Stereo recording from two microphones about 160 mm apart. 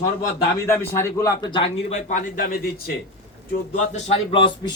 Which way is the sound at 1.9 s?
50° left (ahead or behind).